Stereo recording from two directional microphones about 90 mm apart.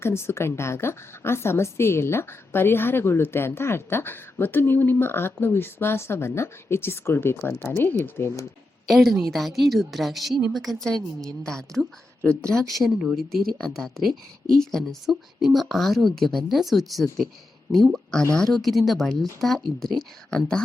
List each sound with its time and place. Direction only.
0.0 s a woman's voice: 30° left (ahead or behind)
8.9 s a woman's voice: centre (ahead or behind)